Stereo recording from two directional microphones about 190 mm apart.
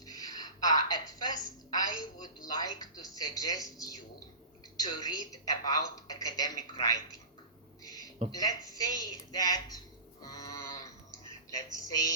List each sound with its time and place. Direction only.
0.0 s a woman's voice: 20° left (ahead or behind)
8.3 s speech: 20° left (ahead or behind)
11.9 s a woman's voice: 20° left (ahead or behind)